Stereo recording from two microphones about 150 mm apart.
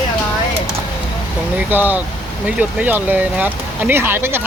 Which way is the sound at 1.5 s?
10° right (ahead or behind).